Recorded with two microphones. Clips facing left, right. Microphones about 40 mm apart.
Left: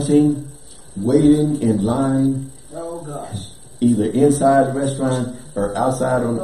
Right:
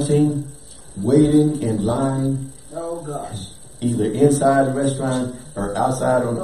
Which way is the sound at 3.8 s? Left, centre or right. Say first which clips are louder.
Left 2 dB; centre.